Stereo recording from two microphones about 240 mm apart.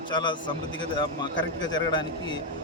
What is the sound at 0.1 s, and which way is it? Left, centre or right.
A man's voice, centre.